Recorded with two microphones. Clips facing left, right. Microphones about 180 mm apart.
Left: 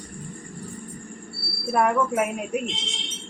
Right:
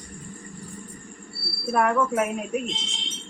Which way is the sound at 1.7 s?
10° left (ahead or behind).